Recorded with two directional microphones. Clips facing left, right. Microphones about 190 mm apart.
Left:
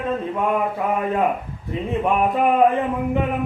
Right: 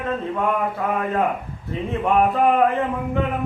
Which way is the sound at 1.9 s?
15° left (ahead or behind).